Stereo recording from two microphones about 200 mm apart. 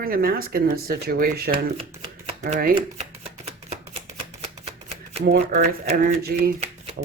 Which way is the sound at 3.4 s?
30° right (ahead or behind).